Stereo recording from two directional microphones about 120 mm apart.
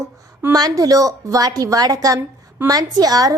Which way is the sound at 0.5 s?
30° right (ahead or behind).